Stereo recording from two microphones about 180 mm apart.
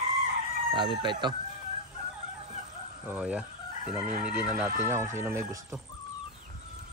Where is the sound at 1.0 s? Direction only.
25° right (ahead or behind).